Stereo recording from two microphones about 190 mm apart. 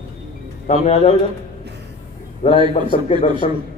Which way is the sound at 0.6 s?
40° left (ahead or behind).